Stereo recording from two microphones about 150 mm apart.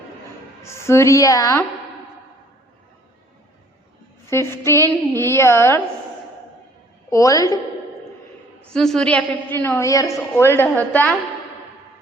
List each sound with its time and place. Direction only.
0.6 s a woman's voice: 20° left (ahead or behind)
4.3 s a woman's voice: 15° left (ahead or behind)
7.1 s a woman's voice: 20° left (ahead or behind)
8.7 s a woman's voice: 5° left (ahead or behind)